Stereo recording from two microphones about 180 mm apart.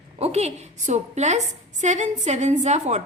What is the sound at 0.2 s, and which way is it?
A woman's voice, 35° right (ahead or behind).